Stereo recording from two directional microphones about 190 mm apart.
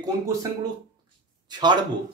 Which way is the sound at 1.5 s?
25° right (ahead or behind).